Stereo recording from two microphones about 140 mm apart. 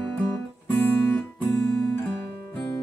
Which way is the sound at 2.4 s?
20° left (ahead or behind).